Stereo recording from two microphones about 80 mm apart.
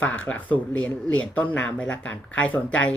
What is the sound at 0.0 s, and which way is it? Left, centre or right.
A woman's voice, centre.